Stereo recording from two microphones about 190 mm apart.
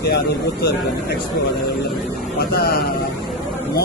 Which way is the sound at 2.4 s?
55° left (ahead or behind).